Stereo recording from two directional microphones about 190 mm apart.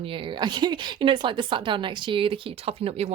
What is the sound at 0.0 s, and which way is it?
A woman's voice, 25° right (ahead or behind).